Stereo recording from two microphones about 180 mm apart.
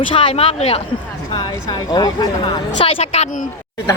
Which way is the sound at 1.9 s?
20° left (ahead or behind).